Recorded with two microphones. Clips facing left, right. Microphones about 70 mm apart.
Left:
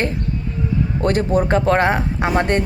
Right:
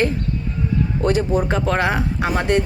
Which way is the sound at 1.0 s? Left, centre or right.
Left.